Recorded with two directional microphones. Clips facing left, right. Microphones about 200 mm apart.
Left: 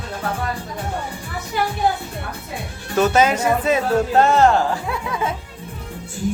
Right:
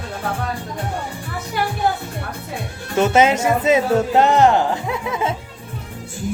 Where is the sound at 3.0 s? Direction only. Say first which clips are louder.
Right 1 dB; 25° right (ahead or behind).